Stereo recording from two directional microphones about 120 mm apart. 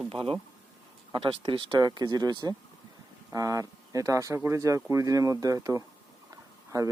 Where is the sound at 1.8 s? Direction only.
30° right (ahead or behind).